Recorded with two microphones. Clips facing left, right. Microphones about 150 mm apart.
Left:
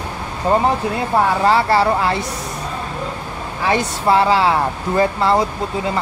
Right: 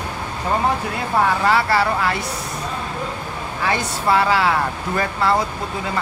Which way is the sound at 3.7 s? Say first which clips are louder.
Left 4 dB; 25° left (ahead or behind).